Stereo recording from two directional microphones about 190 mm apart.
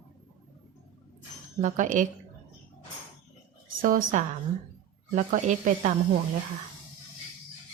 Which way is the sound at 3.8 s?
45° right (ahead or behind).